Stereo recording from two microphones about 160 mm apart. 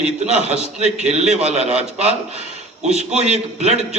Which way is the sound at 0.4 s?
45° right (ahead or behind).